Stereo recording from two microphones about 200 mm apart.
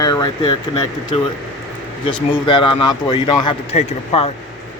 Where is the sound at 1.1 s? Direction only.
30° left (ahead or behind).